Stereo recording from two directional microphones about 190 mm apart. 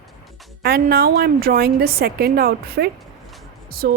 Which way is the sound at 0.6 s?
55° right (ahead or behind).